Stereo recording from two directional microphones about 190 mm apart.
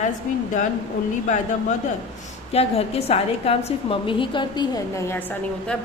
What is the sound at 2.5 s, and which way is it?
A woman's voice, 30° left (ahead or behind).